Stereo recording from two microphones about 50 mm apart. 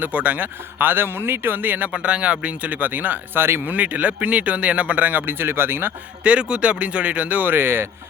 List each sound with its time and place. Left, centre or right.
0.0 s speech: right
1.9 s speech: right
3.7 s speech: right
6.2 s speech: right